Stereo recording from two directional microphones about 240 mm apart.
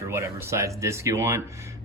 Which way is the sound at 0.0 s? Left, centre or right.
Centre.